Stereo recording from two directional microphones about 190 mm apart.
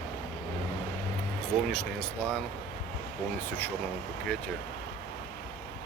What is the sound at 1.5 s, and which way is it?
Speech, 5° left (ahead or behind).